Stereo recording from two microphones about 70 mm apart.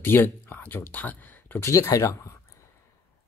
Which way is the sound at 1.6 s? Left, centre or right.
Left.